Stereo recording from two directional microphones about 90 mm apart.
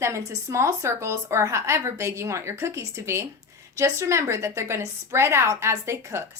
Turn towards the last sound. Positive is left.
turn(degrees=-30)  # may be behind; listen again after turning